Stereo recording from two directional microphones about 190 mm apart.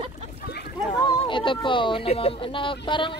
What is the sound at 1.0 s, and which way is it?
Speech, 25° left (ahead or behind).